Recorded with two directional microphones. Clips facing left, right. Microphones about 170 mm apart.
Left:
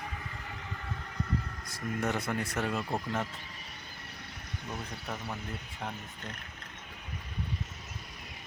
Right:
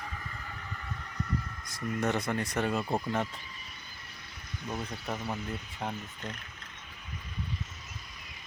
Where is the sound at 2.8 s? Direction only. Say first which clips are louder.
Right 3 dB; 10° right (ahead or behind).